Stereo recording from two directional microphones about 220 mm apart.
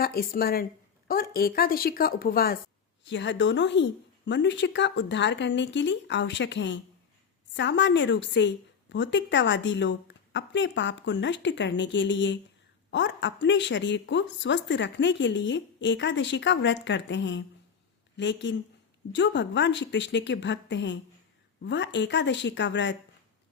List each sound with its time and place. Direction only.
0.0 s a woman's voice: 45° left (ahead or behind)
3.0 s a woman's voice: 55° left (ahead or behind)